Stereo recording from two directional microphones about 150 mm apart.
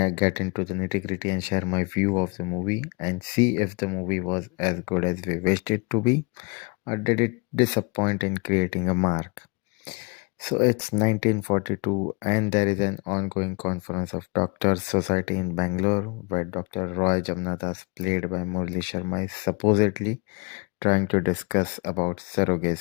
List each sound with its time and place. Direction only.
0.0 s speech: 40° left (ahead or behind)
0.4 s speech: 30° left (ahead or behind)
3.8 s speech: 15° left (ahead or behind)
4.2 s speech: 25° left (ahead or behind)
10.4 s speech: 30° left (ahead or behind)